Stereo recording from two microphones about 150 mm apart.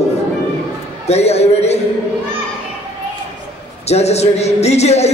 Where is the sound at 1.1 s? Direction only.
45° left (ahead or behind).